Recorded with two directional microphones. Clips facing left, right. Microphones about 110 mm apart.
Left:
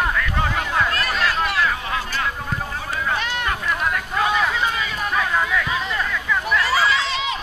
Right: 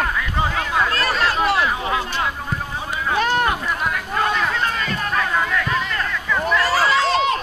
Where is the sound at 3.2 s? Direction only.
45° right (ahead or behind).